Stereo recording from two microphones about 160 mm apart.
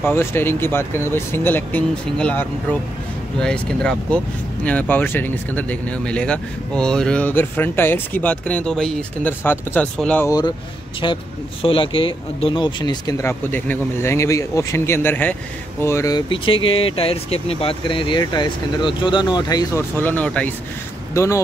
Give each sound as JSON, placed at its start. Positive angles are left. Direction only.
{"t": 0.0, "sound": "speech", "side_deg": 15}
{"t": 10.2, "sound": "speech", "side_deg": 25}
{"t": 13.2, "sound": "speech", "side_deg": 15}
{"t": 20.0, "sound": "speech", "side_deg": 10}